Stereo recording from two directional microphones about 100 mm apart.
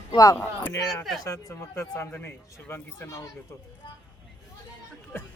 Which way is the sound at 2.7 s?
25° left (ahead or behind).